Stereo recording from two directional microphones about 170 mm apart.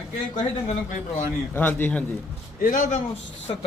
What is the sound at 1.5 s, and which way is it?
Speech, 10° left (ahead or behind).